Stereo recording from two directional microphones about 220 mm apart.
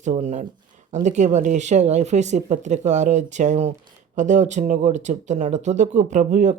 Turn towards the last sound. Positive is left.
turn(degrees=-35)  # may be behind; listen again after turning